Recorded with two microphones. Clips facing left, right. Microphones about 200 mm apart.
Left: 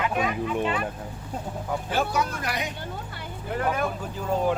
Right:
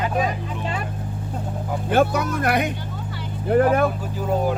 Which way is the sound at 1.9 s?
55° right (ahead or behind).